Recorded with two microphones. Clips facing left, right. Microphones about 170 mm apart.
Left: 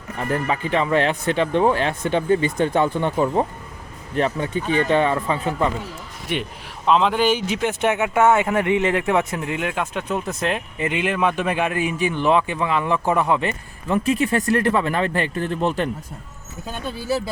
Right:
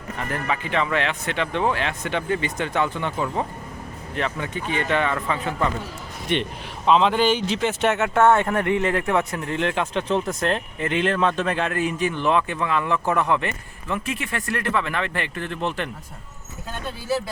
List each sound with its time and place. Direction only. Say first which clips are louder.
0.3 s speech: left 5 dB; 35° left (ahead or behind)
6.3 s speech: right 2 dB; 5° left (ahead or behind)
13.9 s speech: left 8 dB; 35° left (ahead or behind)